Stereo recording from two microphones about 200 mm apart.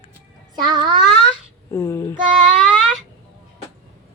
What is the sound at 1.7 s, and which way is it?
Child singing, 15° left (ahead or behind).